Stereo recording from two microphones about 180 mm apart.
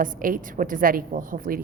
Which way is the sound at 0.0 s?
50° right (ahead or behind).